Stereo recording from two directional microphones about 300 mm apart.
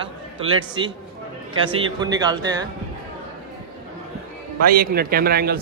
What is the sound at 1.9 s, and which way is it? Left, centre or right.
Speech, centre.